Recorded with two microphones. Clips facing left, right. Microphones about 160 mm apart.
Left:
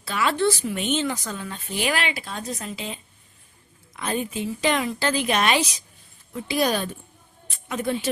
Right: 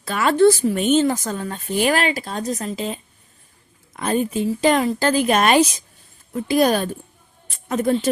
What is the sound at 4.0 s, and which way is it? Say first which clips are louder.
A woman's voice: right 6 dB; 45° right (ahead or behind).